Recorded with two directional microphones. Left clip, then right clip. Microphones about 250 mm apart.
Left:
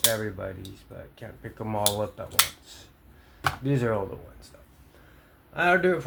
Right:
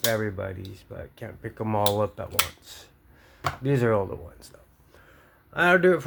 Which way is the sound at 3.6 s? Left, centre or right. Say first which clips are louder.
Right 7 dB; right.